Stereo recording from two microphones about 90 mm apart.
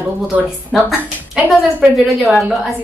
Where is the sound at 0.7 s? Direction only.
5° right (ahead or behind).